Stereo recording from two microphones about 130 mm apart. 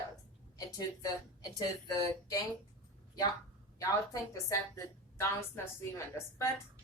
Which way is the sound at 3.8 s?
25° left (ahead or behind).